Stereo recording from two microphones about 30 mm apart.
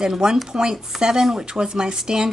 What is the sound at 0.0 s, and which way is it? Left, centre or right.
A woman's voice, right.